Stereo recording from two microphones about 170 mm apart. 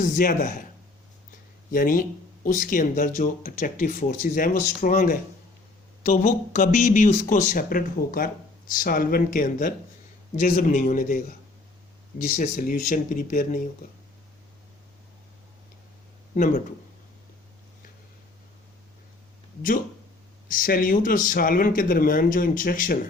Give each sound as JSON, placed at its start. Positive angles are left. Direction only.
{"t": 0.0, "sound": "speech", "side_deg": 50}
{"t": 1.7, "sound": "speech", "side_deg": 55}
{"t": 6.0, "sound": "speech", "side_deg": 45}
{"t": 16.3, "sound": "speech", "side_deg": 50}
{"t": 20.5, "sound": "speech", "side_deg": 55}